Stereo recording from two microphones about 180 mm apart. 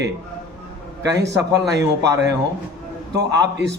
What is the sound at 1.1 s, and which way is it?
Speech, 75° right (ahead or behind).